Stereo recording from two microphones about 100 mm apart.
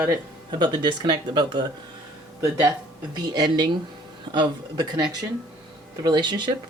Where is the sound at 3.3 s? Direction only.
45° right (ahead or behind).